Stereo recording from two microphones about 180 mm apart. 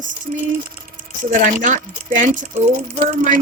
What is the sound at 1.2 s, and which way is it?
Speech, 45° right (ahead or behind).